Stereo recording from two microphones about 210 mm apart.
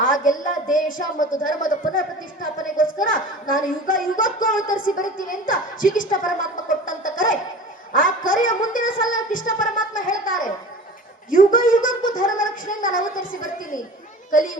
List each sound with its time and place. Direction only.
0.0 s a child's voice: 40° left (ahead or behind)